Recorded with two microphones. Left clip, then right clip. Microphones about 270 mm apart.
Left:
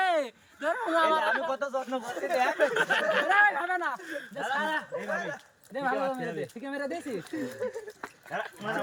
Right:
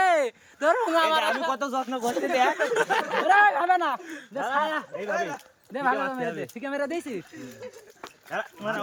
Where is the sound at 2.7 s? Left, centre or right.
Centre.